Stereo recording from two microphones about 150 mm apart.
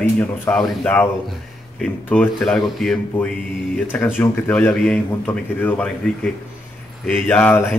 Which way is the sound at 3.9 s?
15° left (ahead or behind).